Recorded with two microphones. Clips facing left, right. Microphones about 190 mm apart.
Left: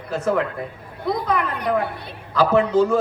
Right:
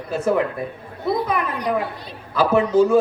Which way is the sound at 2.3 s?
10° right (ahead or behind).